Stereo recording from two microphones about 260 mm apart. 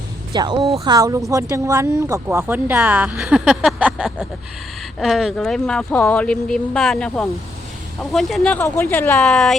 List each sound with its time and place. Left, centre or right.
0.3 s speech: centre